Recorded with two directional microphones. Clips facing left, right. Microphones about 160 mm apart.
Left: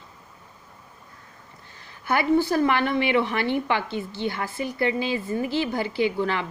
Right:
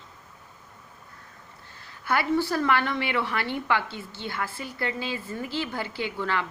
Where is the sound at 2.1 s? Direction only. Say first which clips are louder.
Left 4 dB; 20° left (ahead or behind).